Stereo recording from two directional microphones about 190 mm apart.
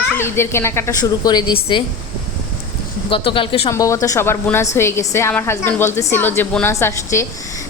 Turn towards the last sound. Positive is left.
turn(degrees=15)  # may be behind; listen again after turning